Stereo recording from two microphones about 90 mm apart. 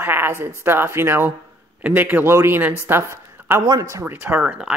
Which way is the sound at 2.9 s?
25° right (ahead or behind).